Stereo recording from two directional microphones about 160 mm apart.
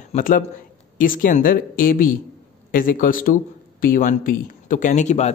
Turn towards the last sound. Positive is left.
turn(degrees=45)  # may be behind; listen again after turning